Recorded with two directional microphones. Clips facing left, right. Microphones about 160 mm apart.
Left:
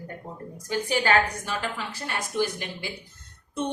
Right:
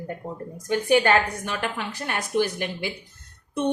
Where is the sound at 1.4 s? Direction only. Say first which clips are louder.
Right 2 dB; 60° right (ahead or behind).